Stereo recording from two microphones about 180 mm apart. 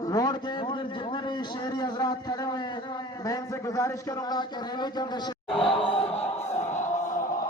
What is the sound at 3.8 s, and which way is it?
A man's voice, 20° left (ahead or behind).